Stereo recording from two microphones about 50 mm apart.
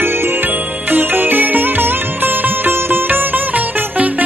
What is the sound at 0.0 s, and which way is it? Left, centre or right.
Music, right.